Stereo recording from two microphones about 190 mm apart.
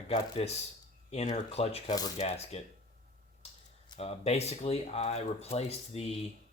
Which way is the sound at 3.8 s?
30° left (ahead or behind).